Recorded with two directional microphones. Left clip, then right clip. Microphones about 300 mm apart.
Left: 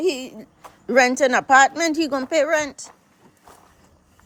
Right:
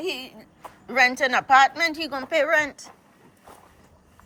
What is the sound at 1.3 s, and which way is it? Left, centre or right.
A woman's voice, centre.